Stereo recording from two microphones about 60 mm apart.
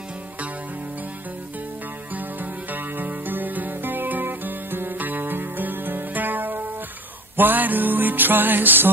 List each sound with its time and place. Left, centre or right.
2.7 s music: right